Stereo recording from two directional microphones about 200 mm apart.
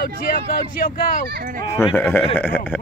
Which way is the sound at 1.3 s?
40° right (ahead or behind).